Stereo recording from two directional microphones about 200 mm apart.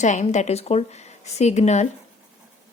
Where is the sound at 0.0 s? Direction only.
35° left (ahead or behind).